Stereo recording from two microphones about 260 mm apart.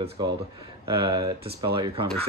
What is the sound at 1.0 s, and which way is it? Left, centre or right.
Speech, centre.